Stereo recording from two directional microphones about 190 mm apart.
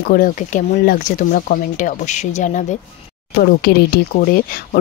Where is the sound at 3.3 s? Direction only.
55° left (ahead or behind).